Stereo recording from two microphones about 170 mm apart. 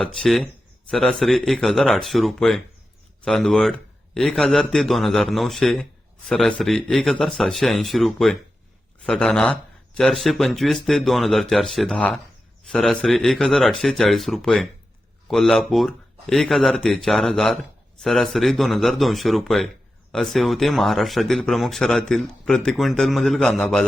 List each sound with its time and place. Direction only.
0.0 s speech: 5° left (ahead or behind)